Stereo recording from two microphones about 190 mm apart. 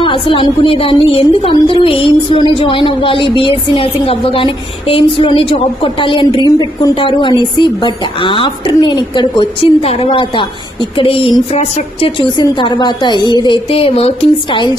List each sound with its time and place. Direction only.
0.0 s a woman's voice: 25° left (ahead or behind)